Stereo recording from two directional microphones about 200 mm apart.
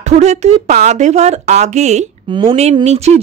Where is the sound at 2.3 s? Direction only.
25° right (ahead or behind).